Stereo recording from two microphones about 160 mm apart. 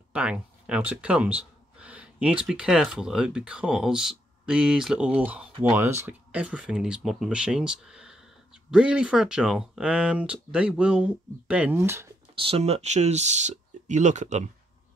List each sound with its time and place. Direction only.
0.1 s speech: 5° right (ahead or behind)
12.4 s speech: 35° right (ahead or behind)